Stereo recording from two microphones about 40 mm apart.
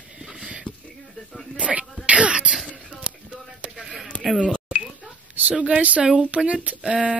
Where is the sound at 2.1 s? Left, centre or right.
Right.